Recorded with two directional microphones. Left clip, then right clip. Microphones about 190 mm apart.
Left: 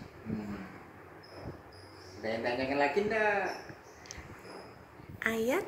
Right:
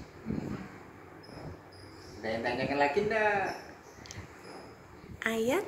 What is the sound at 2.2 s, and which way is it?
Speech, 15° left (ahead or behind).